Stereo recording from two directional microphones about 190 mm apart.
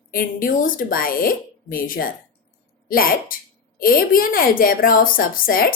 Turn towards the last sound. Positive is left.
turn(degrees=50)  # may be behind; listen again after turning